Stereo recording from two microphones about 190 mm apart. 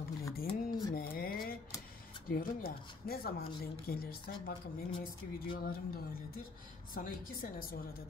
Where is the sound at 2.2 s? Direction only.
50° left (ahead or behind).